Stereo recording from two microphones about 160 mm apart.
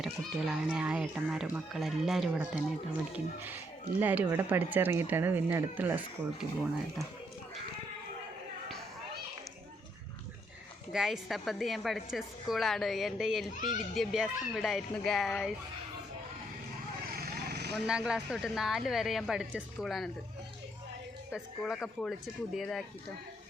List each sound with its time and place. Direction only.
0.0 s speech: centre (ahead or behind)
4.0 s speech: 10° right (ahead or behind)
10.9 s speech: 5° right (ahead or behind)
13.6 s speech: 55° left (ahead or behind)
13.9 s speech: centre (ahead or behind)
17.1 s vehicle: 70° right (ahead or behind); by 17.8 s 90° right
17.8 s speech: 5° right (ahead or behind)
21.3 s speech: centre (ahead or behind)